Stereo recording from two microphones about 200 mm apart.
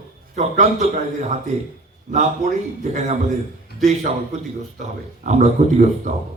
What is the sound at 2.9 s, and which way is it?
Speech, 35° right (ahead or behind).